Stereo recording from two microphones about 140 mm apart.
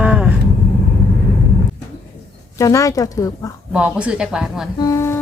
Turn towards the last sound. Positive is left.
turn(degrees=20)  # may be behind; listen again after turning